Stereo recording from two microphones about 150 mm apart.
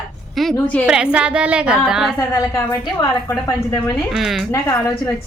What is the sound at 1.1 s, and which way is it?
Speech, 10° right (ahead or behind).